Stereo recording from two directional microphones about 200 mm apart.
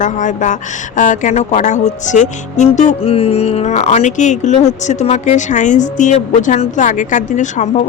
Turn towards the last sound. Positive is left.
turn(degrees=35)  # may be behind; listen again after turning